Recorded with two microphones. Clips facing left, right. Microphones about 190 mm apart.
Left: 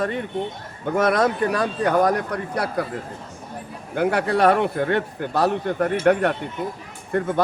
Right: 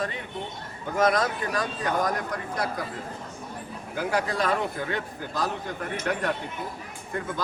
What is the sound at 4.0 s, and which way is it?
Speech, 65° left (ahead or behind).